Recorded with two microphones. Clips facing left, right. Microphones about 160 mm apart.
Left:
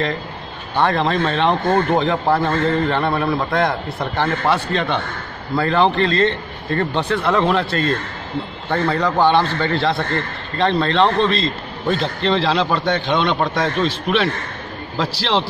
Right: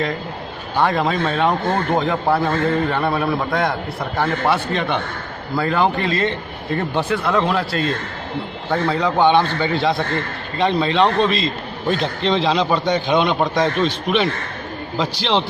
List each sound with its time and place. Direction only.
0.7 s a man's voice: 5° right (ahead or behind)
4.2 s a man's voice: 15° right (ahead or behind)
7.1 s a man's voice: centre (ahead or behind)